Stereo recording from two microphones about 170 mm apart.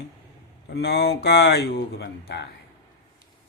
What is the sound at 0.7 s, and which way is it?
A man's voice, 70° left (ahead or behind).